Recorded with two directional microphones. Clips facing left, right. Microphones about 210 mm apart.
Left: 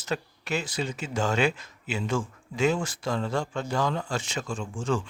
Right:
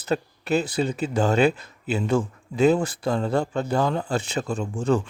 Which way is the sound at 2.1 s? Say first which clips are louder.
Right 6 dB; 60° right (ahead or behind).